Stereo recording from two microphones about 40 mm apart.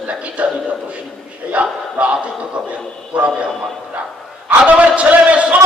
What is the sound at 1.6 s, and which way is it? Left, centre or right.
Speech, right.